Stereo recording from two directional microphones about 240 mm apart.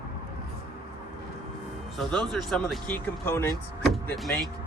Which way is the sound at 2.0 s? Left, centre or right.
Centre.